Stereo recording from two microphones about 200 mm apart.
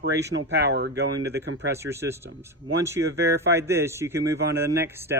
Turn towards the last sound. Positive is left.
turn(degrees=-10)  # may be behind; listen again after turning